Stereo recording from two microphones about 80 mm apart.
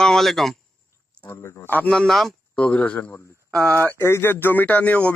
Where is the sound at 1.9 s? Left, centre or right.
Centre.